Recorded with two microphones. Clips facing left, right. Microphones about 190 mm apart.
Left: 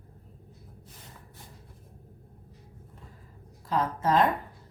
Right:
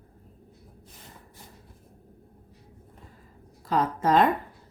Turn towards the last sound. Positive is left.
turn(degrees=-80)